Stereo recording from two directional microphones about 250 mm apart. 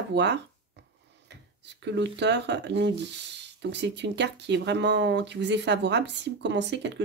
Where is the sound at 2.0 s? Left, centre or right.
Right.